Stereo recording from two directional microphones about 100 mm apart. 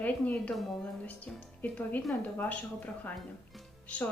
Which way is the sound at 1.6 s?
15° left (ahead or behind).